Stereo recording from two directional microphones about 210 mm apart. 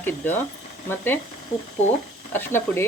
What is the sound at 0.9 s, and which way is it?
Speech, 10° left (ahead or behind).